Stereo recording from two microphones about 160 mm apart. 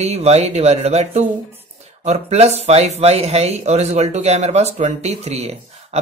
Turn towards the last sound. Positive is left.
turn(degrees=-40)  # may be behind; listen again after turning